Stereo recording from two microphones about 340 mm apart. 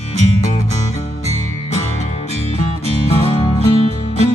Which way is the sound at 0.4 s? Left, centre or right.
Centre.